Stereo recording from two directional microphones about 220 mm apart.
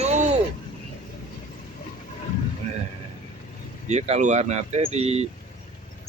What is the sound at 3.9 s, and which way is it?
Speech, 30° right (ahead or behind).